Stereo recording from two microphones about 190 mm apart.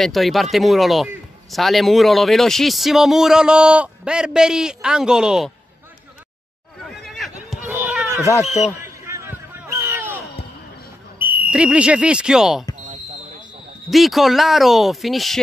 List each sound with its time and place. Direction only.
0.0 s speech: centre (ahead or behind)
7.0 s horse: centre (ahead or behind)
7.7 s run: 5° right (ahead or behind)
8.4 s a man's voice: 35° left (ahead or behind)
8.8 s basketball bounce: 15° right (ahead or behind)
11.1 s speech: 10° right (ahead or behind)
13.8 s speech: centre (ahead or behind)